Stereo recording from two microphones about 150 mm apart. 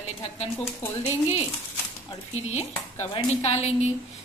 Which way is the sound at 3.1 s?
45° left (ahead or behind).